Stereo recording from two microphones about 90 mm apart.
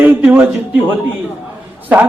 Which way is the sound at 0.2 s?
15° right (ahead or behind).